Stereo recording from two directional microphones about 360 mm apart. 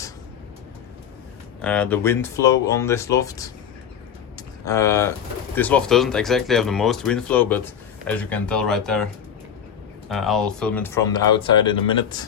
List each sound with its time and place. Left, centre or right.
1.6 s speech: centre
4.4 s a sound: centre
5.5 s speech: centre
10.1 s speech: centre